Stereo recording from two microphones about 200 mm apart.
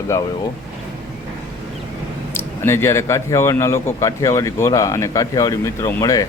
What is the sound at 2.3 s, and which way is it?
A man's voice, 10° left (ahead or behind).